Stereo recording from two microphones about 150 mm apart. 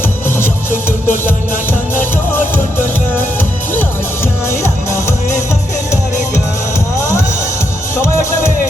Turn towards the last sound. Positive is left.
turn(degrees=20)  # may be behind; listen again after turning